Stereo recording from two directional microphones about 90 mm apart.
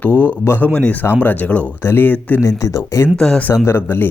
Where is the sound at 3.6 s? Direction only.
25° left (ahead or behind).